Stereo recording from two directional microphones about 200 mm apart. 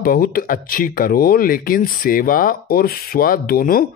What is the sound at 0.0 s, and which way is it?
Speech, 45° left (ahead or behind).